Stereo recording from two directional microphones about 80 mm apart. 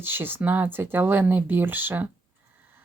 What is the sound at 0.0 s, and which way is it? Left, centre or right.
Speech, right.